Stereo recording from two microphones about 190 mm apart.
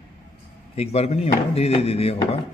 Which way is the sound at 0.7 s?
35° left (ahead or behind).